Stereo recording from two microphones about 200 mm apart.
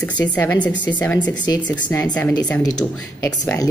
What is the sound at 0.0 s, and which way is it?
A woman's voice, 5° left (ahead or behind).